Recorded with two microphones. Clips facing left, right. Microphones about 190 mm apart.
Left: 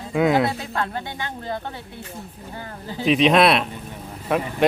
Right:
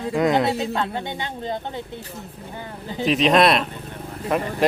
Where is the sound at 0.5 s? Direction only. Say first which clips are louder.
Right 3 dB; 20° right (ahead or behind).